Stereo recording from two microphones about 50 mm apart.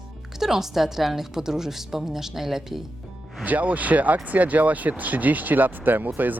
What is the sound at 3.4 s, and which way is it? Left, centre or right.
Speech, right.